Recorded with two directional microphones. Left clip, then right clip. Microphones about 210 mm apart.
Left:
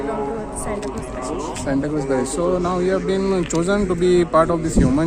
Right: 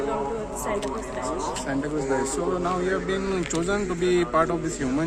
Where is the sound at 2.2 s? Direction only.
55° left (ahead or behind).